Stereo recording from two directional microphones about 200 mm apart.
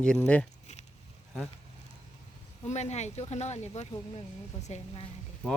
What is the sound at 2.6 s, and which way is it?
Speech, 35° left (ahead or behind).